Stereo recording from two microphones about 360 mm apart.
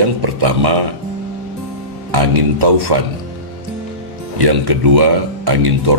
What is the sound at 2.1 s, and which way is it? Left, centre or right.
Speech, right.